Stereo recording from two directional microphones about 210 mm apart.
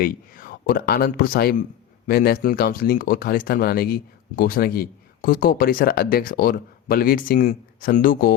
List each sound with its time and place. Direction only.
0.0 s speech: 45° left (ahead or behind)